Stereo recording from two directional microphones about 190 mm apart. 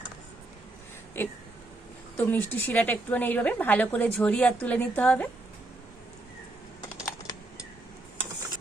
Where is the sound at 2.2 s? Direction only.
10° left (ahead or behind).